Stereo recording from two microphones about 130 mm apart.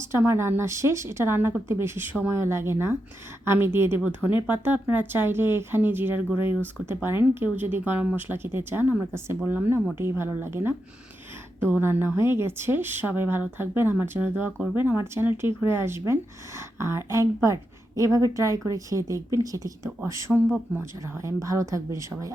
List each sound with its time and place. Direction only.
0.0 s a woman's voice: 20° right (ahead or behind)